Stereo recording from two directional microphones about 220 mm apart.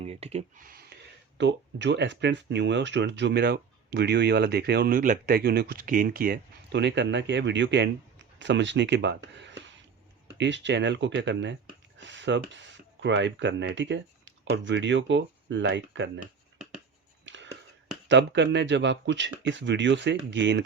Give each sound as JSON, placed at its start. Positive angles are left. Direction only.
{"t": 0.0, "sound": "speech", "side_deg": -30}
{"t": 1.4, "sound": "speech", "side_deg": -55}
{"t": 17.2, "sound": "a sound", "side_deg": -55}
{"t": 18.1, "sound": "speech", "side_deg": -55}